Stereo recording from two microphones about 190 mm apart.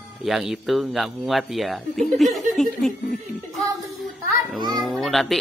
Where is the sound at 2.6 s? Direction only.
Centre (ahead or behind).